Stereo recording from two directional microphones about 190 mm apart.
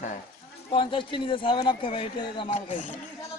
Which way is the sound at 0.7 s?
25° left (ahead or behind).